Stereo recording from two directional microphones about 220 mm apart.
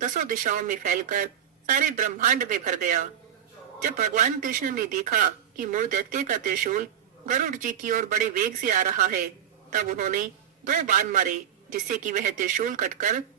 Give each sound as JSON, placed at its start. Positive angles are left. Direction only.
{"t": 0.0, "sound": "a man's voice", "side_deg": -35}